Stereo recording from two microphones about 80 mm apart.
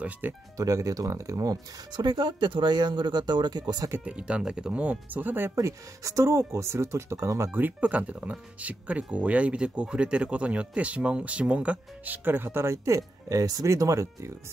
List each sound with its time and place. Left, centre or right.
0.2 s speech: right
0.6 s speech: right
2.0 s speech: right
4.0 s speech: centre
5.6 s speech: right
7.6 s speech: centre; by 14.3 s right